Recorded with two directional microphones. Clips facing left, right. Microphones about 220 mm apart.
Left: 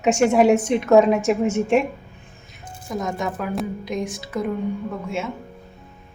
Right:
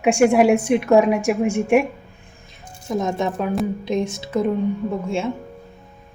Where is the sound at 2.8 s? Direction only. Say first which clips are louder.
Right 4 dB; 25° right (ahead or behind).